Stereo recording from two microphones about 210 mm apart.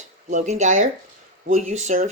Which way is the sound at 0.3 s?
35° right (ahead or behind).